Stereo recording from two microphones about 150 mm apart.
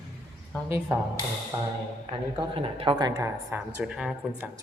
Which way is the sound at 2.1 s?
35° right (ahead or behind).